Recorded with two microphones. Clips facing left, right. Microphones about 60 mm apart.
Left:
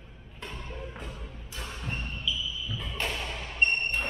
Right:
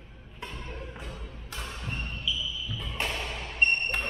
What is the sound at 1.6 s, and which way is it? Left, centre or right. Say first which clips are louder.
Basketball bounce: left 1 dB; centre.